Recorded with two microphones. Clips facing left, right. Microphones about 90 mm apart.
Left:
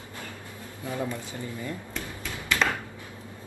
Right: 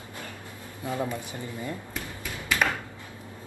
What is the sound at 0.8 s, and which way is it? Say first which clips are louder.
Speech: right 1 dB; 20° right (ahead or behind).